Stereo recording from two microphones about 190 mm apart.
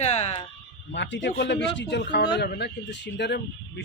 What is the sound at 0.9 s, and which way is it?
Speech, 70° left (ahead or behind).